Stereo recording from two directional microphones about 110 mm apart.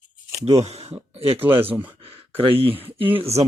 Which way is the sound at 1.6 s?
15° right (ahead or behind).